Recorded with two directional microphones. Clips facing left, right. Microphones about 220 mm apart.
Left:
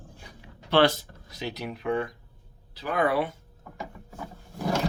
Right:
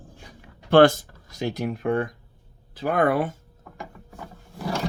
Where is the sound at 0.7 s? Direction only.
50° right (ahead or behind).